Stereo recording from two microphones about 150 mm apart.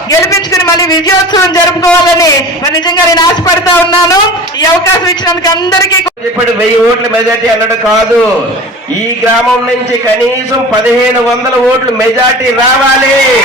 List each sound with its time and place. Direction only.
0.1 s a man's voice: 20° left (ahead or behind)